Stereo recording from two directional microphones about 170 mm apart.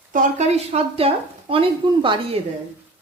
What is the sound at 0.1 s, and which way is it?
A woman's voice, 45° right (ahead or behind).